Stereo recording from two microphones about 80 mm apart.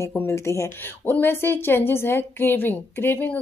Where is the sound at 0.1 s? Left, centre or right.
Left.